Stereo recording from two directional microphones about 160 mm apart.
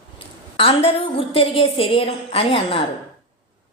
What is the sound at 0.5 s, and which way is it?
A woman's voice, 35° left (ahead or behind).